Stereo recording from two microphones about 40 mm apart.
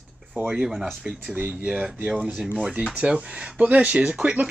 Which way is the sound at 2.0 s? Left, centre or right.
Right.